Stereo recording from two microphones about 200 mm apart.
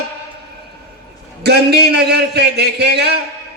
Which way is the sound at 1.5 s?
55° right (ahead or behind).